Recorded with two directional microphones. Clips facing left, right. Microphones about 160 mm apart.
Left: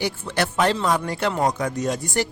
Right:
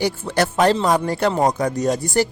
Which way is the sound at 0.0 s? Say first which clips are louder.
Right 4 dB; 40° right (ahead or behind).